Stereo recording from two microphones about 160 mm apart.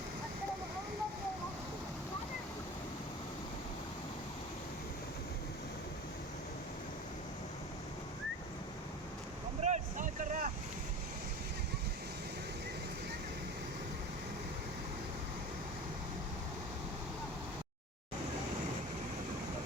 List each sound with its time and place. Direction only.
9.6 s vehicle: 50° right (ahead or behind)